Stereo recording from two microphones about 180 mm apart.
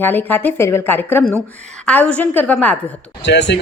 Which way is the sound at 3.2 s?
75° left (ahead or behind).